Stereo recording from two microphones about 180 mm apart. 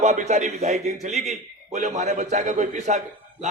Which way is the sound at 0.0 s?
40° right (ahead or behind).